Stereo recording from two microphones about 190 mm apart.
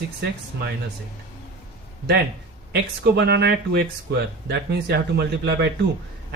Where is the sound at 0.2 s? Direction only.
55° right (ahead or behind).